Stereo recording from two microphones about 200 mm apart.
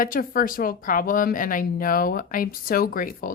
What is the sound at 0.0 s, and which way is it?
Speech, 45° left (ahead or behind).